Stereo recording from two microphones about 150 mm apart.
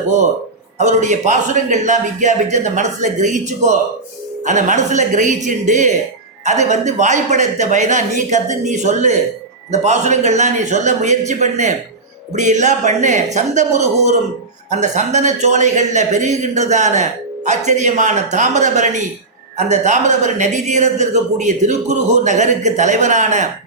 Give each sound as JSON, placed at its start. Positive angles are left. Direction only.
{"t": 0.8, "sound": "a man's voice", "side_deg": -50}